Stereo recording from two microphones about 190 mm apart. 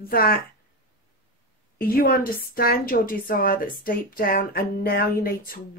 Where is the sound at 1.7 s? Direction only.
50° left (ahead or behind).